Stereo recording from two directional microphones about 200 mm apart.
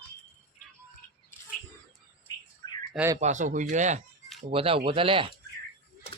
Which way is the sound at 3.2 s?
35° right (ahead or behind).